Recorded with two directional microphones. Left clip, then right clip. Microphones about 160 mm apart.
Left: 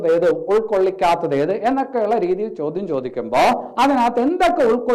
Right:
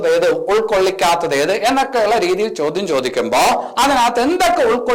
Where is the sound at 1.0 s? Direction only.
25° right (ahead or behind).